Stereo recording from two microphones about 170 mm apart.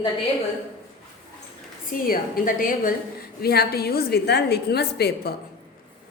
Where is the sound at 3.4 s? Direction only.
65° left (ahead or behind).